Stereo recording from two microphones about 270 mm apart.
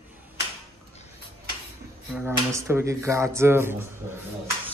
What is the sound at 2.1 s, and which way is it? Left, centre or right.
Speech, centre.